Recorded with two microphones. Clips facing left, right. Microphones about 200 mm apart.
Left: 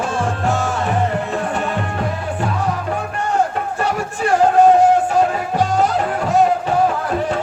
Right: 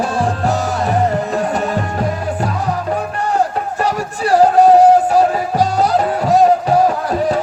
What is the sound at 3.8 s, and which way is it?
Music, 35° right (ahead or behind).